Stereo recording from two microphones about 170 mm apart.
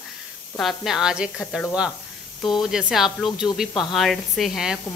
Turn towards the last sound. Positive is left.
turn(degrees=0)  # may be behind; listen again after turning